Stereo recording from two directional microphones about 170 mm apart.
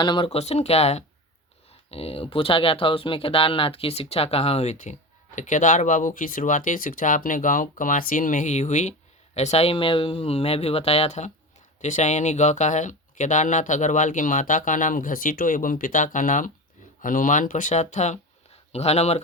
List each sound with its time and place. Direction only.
0.0 s speech: 30° left (ahead or behind)